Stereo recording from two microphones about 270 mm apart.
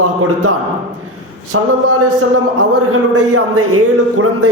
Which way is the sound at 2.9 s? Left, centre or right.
Right.